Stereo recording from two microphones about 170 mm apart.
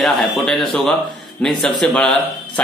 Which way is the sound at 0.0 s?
Centre (ahead or behind).